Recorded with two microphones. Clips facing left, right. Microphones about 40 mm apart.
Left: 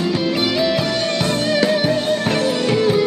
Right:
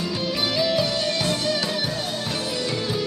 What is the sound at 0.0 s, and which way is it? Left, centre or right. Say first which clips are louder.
Music: left 7 dB; left.